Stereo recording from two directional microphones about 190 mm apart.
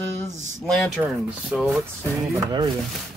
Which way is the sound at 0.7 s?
Centre (ahead or behind).